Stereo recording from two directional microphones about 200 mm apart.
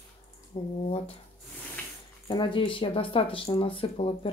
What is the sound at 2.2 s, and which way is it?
Speech, 25° left (ahead or behind).